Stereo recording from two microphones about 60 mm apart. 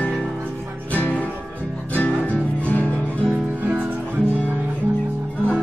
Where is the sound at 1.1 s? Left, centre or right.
Right.